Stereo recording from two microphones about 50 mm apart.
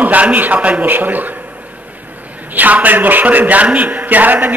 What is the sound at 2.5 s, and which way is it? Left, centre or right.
A man's voice, right.